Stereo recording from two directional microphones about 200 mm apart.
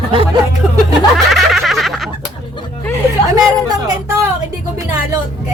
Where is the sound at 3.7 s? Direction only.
15° right (ahead or behind).